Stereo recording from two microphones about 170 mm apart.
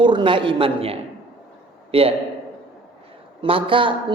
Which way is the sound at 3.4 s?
30° right (ahead or behind).